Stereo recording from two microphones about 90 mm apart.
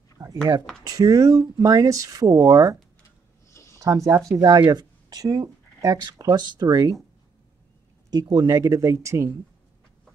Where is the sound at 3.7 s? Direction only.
35° right (ahead or behind).